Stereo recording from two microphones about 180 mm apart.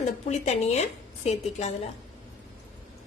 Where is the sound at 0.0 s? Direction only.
40° left (ahead or behind).